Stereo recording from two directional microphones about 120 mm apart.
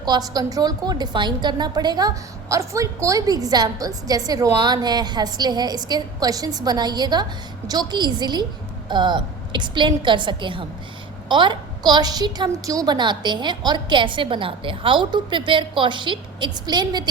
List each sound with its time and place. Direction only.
0.0 s a woman's voice: 35° right (ahead or behind)